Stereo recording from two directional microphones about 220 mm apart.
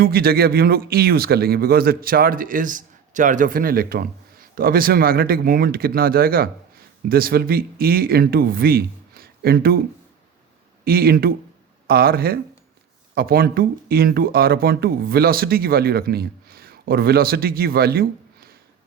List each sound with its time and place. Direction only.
0.0 s speech: 45° right (ahead or behind)
10.8 s speech: 45° right (ahead or behind)